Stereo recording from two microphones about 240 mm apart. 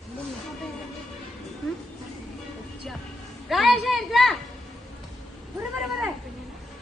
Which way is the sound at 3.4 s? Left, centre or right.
Centre.